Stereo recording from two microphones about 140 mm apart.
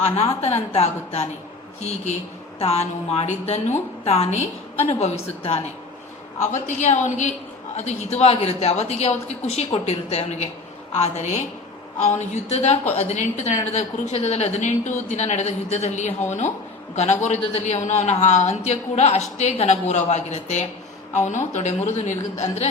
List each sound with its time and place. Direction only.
0.4 s a man's voice: 50° left (ahead or behind)
6.4 s a woman's voice: 60° left (ahead or behind)